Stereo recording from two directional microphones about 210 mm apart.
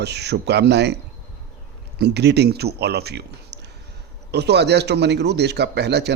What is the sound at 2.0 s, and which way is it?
Speech, 50° right (ahead or behind).